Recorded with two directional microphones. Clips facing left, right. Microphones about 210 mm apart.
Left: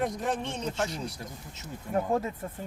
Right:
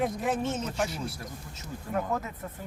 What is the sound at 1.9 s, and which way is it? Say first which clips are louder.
Speech: left 3 dB; 30° left (ahead or behind).